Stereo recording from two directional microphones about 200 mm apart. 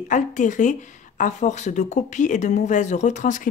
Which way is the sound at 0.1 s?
40° left (ahead or behind).